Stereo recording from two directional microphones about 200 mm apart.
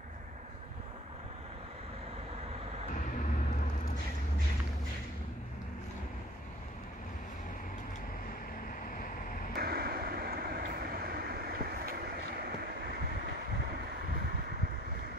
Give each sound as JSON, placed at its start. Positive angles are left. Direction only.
{"t": 9.6, "sound": "vehicle", "side_deg": -50}